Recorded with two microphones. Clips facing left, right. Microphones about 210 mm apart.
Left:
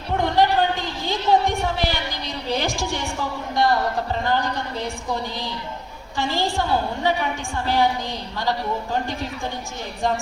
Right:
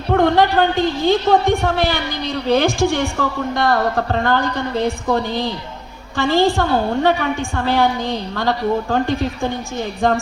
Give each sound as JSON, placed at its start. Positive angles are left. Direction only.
{"t": 0.1, "sound": "a woman's voice", "side_deg": -55}
{"t": 6.1, "sound": "a woman's voice", "side_deg": -55}